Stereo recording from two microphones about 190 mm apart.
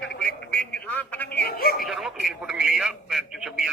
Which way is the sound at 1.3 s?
55° left (ahead or behind).